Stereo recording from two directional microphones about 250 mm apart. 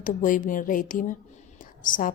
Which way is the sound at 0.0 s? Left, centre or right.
Left.